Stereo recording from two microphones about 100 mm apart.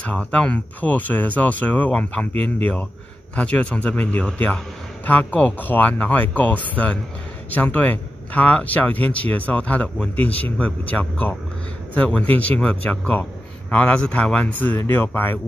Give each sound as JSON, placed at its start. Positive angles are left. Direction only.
{"t": 0.0, "sound": "speech", "side_deg": 10}